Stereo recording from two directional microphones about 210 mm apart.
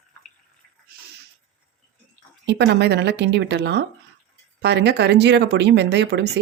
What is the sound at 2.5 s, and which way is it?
Speech, 55° right (ahead or behind).